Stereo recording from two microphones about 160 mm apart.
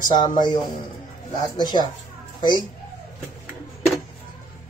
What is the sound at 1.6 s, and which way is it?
Speech, 25° left (ahead or behind).